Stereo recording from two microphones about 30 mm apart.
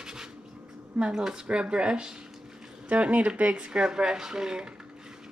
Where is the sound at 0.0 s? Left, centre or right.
Right.